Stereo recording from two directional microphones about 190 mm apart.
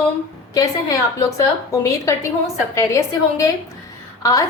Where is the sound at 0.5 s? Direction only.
20° left (ahead or behind).